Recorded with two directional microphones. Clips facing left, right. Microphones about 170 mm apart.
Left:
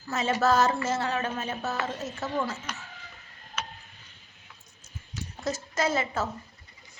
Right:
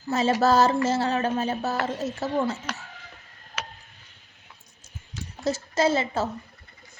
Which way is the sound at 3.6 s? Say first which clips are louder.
Even; 90° right.